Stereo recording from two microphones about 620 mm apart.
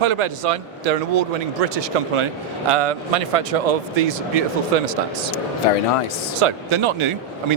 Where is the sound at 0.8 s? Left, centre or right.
Right.